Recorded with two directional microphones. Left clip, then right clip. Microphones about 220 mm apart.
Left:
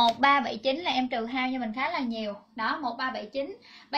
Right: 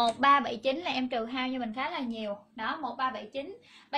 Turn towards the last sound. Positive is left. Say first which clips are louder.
# left 1 dB
turn(degrees=-15)  # may be behind; listen again after turning